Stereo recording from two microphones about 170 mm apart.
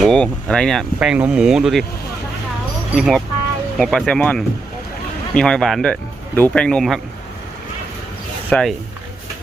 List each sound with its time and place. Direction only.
0.0 s speech: 5° left (ahead or behind)
2.9 s speech: centre (ahead or behind)
8.4 s speech: 5° left (ahead or behind)